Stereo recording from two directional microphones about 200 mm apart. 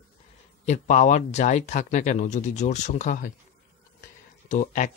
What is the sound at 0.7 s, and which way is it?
Speech, 35° left (ahead or behind).